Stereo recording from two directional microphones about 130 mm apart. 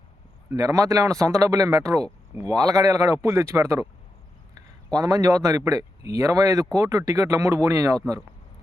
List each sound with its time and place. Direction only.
0.5 s a man's voice: 25° right (ahead or behind)